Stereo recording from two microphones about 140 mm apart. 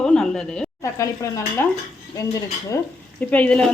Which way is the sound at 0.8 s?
20° left (ahead or behind).